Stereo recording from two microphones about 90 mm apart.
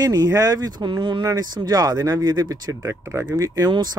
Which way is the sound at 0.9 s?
60° right (ahead or behind).